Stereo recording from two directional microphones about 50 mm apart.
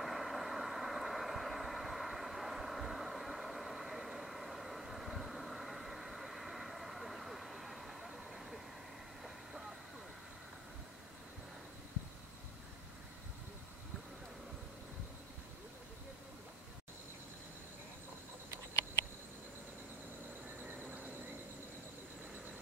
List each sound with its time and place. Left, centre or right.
0.0 s vehicle: centre
20.6 s train: right